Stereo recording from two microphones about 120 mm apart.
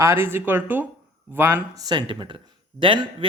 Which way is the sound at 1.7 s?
35° right (ahead or behind).